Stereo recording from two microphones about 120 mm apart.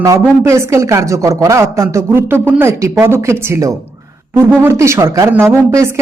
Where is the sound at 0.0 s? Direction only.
25° right (ahead or behind).